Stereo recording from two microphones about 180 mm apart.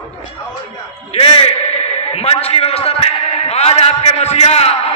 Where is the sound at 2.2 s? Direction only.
35° left (ahead or behind).